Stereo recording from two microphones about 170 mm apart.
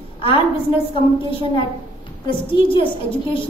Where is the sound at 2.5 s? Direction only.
30° left (ahead or behind).